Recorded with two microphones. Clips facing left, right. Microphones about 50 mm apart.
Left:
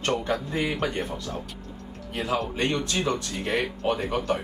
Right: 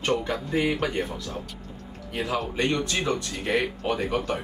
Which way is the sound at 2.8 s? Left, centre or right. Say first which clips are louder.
Even; centre.